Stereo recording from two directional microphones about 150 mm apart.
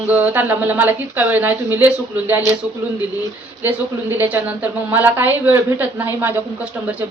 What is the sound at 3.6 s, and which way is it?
A woman's voice, 10° right (ahead or behind).